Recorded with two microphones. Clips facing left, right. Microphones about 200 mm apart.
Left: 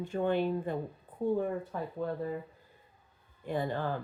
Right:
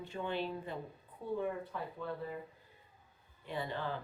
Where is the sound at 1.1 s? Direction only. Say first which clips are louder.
Left 12 dB; 50° left (ahead or behind).